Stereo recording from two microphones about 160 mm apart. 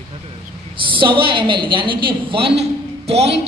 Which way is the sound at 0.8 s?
30° right (ahead or behind).